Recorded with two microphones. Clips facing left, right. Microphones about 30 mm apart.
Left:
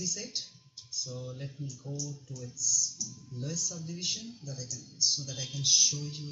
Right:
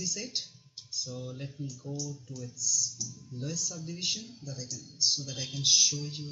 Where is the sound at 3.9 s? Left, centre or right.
Centre.